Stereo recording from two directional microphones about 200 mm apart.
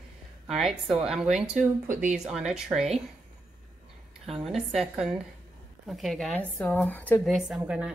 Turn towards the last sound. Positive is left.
turn(degrees=-5)  # may be behind; listen again after turning